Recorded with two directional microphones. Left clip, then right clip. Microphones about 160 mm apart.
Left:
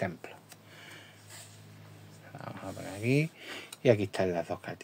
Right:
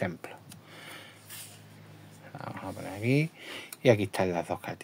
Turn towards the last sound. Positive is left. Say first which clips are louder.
# right 2 dB
turn(degrees=-25)  # may be behind; listen again after turning